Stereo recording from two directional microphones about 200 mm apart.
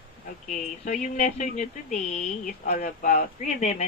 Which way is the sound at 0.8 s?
35° left (ahead or behind).